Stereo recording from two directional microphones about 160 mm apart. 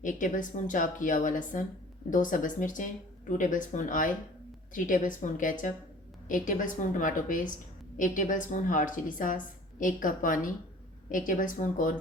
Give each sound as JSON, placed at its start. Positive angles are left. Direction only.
{"t": 0.0, "sound": "a woman's voice", "side_deg": 55}